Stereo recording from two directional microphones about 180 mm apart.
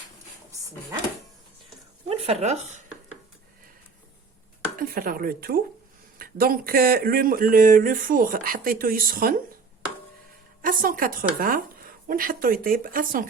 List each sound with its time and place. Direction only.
0.5 s drawer open or close: 15° right (ahead or behind)
2.0 s speech: 35° right (ahead or behind)
4.8 s speech: 50° right (ahead or behind)
10.6 s a woman's voice: 50° right (ahead or behind)